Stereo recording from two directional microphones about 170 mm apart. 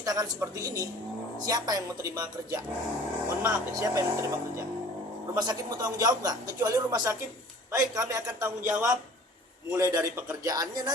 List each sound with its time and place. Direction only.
0.0 s a man's voice: 20° right (ahead or behind)
5.3 s a man's voice: 20° right (ahead or behind)